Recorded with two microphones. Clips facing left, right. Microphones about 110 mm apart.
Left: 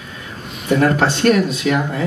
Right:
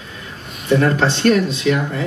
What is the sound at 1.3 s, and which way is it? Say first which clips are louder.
Speech: left 1 dB; 30° right (ahead or behind).